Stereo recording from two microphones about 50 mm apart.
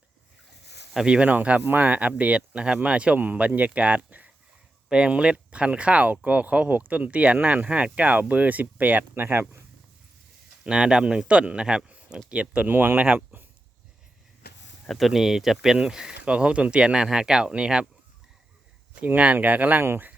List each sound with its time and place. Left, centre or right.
1.0 s speech: centre
1.3 s speech: right
4.9 s speech: right
10.6 s speech: centre
12.6 s speech: right
13.3 s a sound: right
14.8 s speech: centre
18.9 s speech: right